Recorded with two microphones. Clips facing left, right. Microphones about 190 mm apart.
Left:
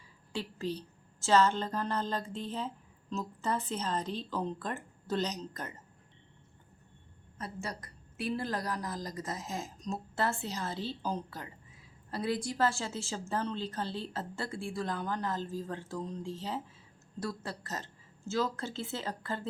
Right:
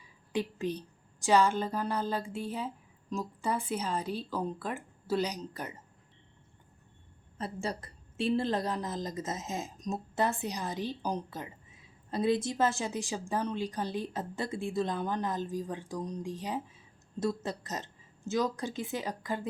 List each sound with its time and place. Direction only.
0.3 s a woman's voice: 15° right (ahead or behind)
7.3 s a woman's voice: 30° right (ahead or behind); by 19.5 s 15° right (ahead or behind)